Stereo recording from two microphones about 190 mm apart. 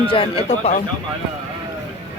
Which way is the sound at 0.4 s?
40° left (ahead or behind).